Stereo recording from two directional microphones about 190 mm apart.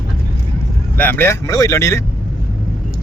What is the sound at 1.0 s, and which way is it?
Speech, 10° left (ahead or behind).